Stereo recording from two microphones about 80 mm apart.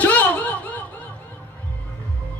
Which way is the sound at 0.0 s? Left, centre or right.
Centre.